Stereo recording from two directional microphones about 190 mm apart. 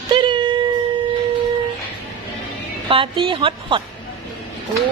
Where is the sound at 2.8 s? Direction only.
30° right (ahead or behind).